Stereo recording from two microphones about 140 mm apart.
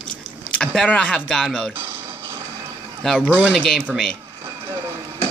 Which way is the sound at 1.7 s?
15° right (ahead or behind).